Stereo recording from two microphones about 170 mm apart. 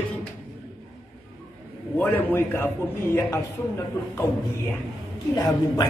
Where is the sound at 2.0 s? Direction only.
10° left (ahead or behind).